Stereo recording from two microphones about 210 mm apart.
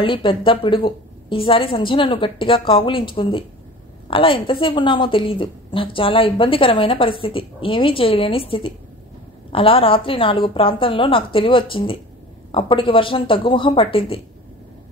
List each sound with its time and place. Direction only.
0.0 s a woman's voice: 25° left (ahead or behind)